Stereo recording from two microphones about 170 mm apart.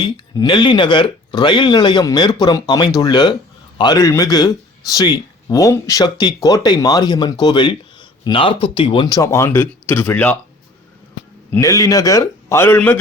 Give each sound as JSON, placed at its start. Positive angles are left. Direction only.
{"t": 0.0, "sound": "speech", "side_deg": 30}
{"t": 11.5, "sound": "speech", "side_deg": 20}